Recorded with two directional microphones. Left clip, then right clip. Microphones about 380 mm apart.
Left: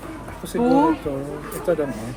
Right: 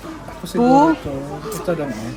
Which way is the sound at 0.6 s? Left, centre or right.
Centre.